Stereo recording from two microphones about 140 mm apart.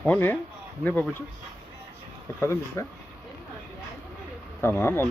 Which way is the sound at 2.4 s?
20° left (ahead or behind).